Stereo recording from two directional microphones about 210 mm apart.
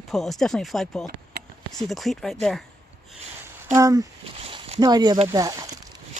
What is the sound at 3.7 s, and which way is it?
Speech, 15° right (ahead or behind).